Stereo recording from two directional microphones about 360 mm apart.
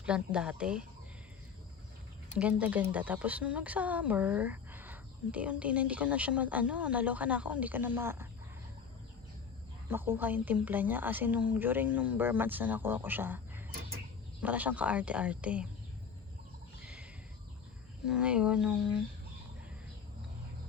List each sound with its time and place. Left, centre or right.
0.0 s speech: centre
2.4 s speech: centre
9.9 s speech: centre
16.8 s a sound: centre
18.0 s speech: centre